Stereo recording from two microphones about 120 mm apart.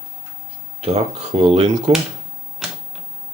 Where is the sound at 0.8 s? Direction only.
60° right (ahead or behind).